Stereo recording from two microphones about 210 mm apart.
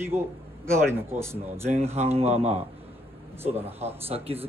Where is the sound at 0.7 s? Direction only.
10° right (ahead or behind).